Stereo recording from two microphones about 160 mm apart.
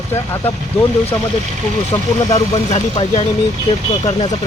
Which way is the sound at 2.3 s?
40° left (ahead or behind).